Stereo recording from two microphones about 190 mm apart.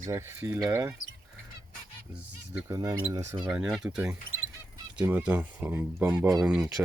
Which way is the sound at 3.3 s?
5° right (ahead or behind).